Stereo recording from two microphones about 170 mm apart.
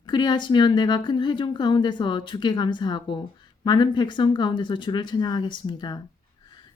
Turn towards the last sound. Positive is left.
turn(degrees=25)  # may be behind; listen again after turning